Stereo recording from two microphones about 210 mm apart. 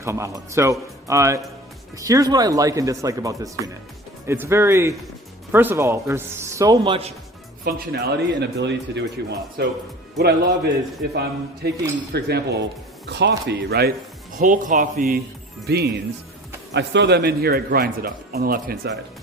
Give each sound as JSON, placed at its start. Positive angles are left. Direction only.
{"t": 0.0, "sound": "speech", "side_deg": -15}
{"t": 7.6, "sound": "a man's voice", "side_deg": -50}
{"t": 14.3, "sound": "a man's voice", "side_deg": -40}